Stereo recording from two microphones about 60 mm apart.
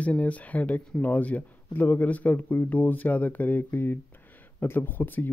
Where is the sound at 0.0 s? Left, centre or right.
Left.